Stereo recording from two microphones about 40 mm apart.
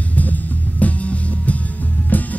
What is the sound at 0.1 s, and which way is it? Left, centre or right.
Music, left.